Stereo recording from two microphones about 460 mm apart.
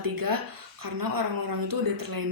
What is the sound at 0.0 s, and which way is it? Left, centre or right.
A woman's voice, right.